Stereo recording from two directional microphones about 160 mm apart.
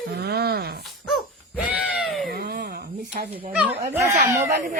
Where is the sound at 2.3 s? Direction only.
70° right (ahead or behind).